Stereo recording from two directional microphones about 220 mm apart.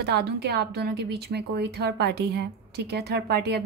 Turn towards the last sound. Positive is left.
turn(degrees=-45)  # may be behind; listen again after turning